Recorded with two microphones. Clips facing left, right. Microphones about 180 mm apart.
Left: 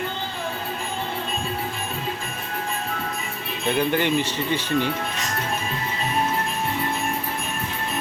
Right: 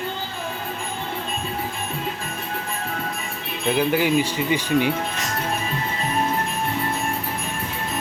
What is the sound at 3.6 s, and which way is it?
Speech, 5° right (ahead or behind).